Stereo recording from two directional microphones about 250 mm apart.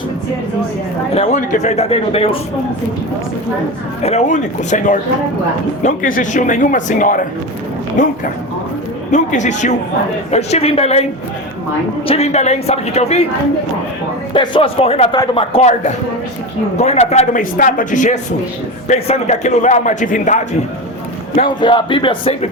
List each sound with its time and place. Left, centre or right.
1.1 s speech: left
4.0 s speech: left
9.1 s speech: left
12.0 s speech: left
14.3 s speech: centre
21.4 s speech: centre